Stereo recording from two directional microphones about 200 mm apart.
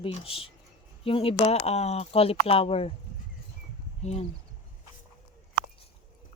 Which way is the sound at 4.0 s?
30° left (ahead or behind).